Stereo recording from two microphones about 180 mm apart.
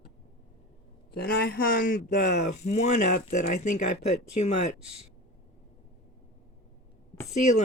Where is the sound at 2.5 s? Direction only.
40° left (ahead or behind).